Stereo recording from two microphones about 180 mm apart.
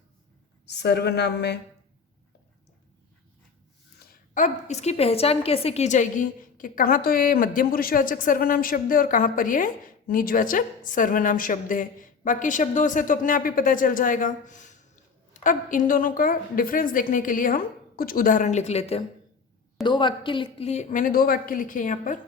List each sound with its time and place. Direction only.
0.6 s a woman's voice: 70° left (ahead or behind)
4.0 s a woman's voice: 50° left (ahead or behind)